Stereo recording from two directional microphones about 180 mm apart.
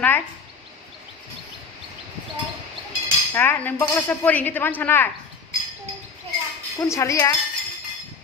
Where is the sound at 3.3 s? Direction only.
10° left (ahead or behind).